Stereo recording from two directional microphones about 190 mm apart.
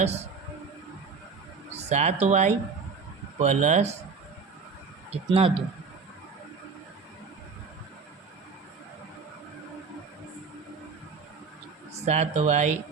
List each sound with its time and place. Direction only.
1.7 s speech: 35° right (ahead or behind)
5.3 s speech: 30° right (ahead or behind)
11.9 s speech: 35° right (ahead or behind)